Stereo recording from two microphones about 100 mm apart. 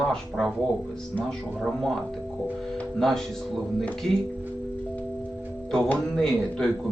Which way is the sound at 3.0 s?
Centre (ahead or behind).